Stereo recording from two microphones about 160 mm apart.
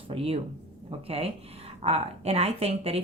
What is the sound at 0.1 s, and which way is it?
Speech, 40° right (ahead or behind).